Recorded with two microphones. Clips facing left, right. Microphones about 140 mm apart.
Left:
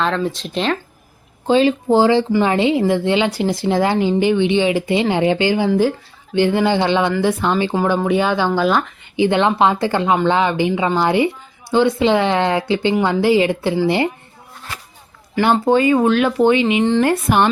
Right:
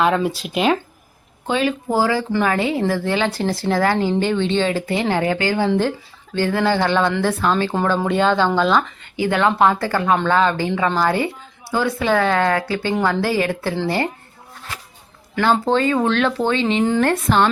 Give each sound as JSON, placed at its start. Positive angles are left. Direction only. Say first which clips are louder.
{"t": 0.0, "sound": "speech", "louder": "right 2 dB", "side_deg": -10}
{"t": 1.5, "sound": "a woman's voice", "louder": "left 6 dB", "side_deg": 30}
{"t": 9.1, "sound": "a woman's voice", "louder": "left 2 dB", "side_deg": 20}
{"t": 15.6, "sound": "speech", "louder": "left 4 dB", "side_deg": 10}